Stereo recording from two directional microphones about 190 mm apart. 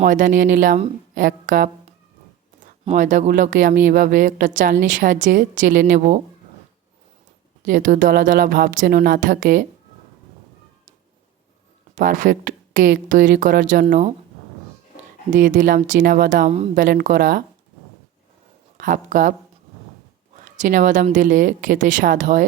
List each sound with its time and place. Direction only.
0.0 s a woman's voice: 45° right (ahead or behind)
7.6 s a woman's voice: 45° right (ahead or behind)
11.9 s a woman's voice: 45° right (ahead or behind)
15.3 s a woman's voice: 45° right (ahead or behind)
18.8 s a woman's voice: 45° right (ahead or behind)
20.4 s a woman's voice: 40° right (ahead or behind)